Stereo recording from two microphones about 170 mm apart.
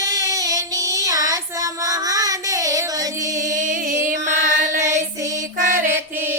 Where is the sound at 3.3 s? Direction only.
50° right (ahead or behind).